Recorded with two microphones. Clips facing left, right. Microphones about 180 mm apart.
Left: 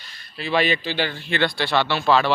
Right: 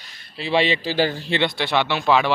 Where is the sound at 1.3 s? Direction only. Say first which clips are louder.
Left 3 dB; 25° right (ahead or behind).